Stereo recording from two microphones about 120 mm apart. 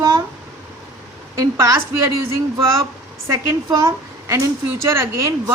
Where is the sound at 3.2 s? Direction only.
25° right (ahead or behind).